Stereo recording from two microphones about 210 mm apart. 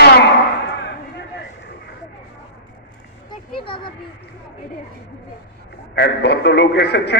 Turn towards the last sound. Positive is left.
turn(degrees=50)  # may be behind; listen again after turning